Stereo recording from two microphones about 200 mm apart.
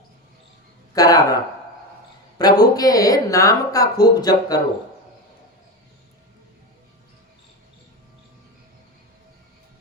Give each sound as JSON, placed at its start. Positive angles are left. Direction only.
{"t": 0.9, "sound": "speech", "side_deg": 20}
{"t": 2.4, "sound": "speech", "side_deg": 20}